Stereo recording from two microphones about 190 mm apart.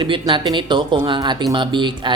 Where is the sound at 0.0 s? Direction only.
25° right (ahead or behind).